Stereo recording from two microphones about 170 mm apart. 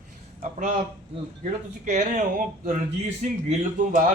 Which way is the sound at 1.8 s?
45° right (ahead or behind).